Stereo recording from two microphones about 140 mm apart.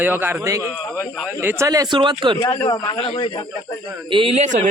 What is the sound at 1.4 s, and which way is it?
Speech, 15° right (ahead or behind).